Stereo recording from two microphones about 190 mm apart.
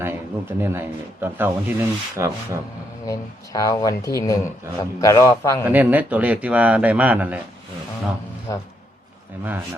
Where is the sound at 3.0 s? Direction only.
20° left (ahead or behind).